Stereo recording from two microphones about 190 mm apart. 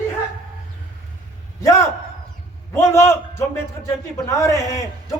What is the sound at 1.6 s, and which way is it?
A man's voice, 15° left (ahead or behind).